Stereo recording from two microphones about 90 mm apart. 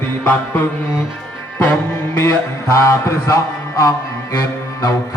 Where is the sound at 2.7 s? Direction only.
35° left (ahead or behind).